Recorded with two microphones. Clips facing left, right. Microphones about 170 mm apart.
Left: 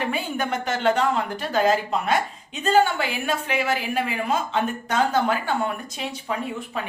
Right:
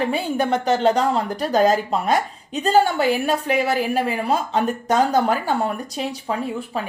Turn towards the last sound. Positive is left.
turn(degrees=-35)  # may be behind; listen again after turning